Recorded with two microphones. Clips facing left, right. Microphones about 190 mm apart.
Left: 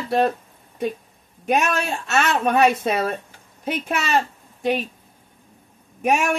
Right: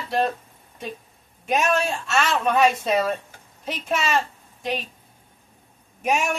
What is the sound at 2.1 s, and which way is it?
Speech, 55° left (ahead or behind).